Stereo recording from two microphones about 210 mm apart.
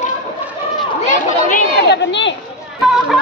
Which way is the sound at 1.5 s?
55° left (ahead or behind).